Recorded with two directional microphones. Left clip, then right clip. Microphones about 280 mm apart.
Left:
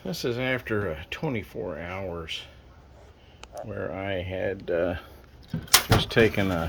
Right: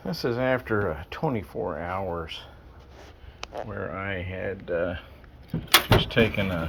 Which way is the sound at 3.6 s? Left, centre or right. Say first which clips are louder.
Left 2 dB; centre.